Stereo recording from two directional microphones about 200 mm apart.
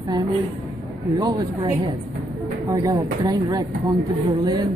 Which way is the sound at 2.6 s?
15° right (ahead or behind).